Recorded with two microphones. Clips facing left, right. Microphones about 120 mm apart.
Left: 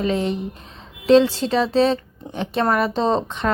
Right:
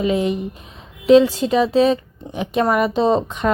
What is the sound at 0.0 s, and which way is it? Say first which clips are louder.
Speech: right 3 dB; 10° right (ahead or behind).